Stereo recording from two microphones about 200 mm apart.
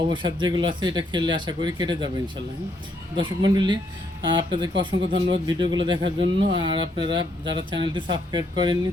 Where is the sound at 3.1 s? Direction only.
25° right (ahead or behind).